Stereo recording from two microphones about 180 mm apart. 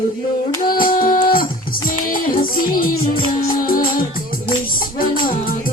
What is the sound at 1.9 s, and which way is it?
Music, 50° left (ahead or behind).